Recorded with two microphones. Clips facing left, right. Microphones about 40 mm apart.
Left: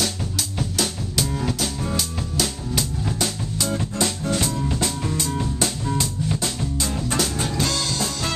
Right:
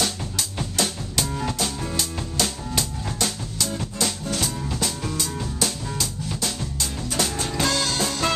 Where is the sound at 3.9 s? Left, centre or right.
Left.